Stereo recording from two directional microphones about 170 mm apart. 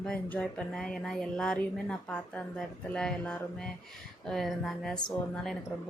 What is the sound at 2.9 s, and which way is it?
Speech, 5° left (ahead or behind).